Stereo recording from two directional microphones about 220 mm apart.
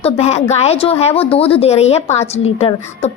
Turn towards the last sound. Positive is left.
turn(degrees=30)  # may be behind; listen again after turning